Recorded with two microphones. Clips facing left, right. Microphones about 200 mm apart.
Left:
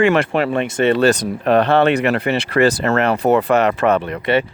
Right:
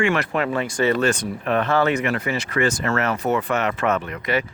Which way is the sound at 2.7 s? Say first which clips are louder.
Left 6 dB; 35° left (ahead or behind).